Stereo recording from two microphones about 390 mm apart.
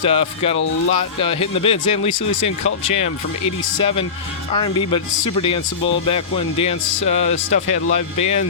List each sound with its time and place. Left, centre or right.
0.0 s speech: centre
4.5 s speech: centre